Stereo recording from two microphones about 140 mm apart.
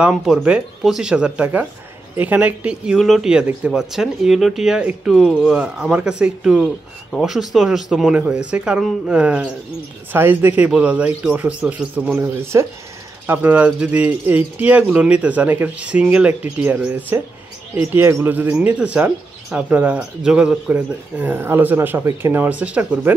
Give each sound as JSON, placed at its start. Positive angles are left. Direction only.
{"t": 0.0, "sound": "speech", "side_deg": -5}